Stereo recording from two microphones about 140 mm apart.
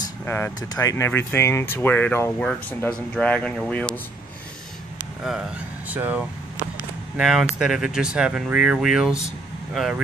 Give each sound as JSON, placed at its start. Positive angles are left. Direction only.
{"t": 0.2, "sound": "speech", "side_deg": 15}
{"t": 5.2, "sound": "speech", "side_deg": -5}